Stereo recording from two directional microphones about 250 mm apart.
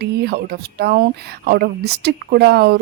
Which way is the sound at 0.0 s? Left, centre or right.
Right.